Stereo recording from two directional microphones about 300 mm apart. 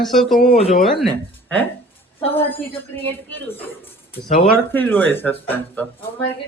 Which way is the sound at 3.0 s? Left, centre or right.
Centre.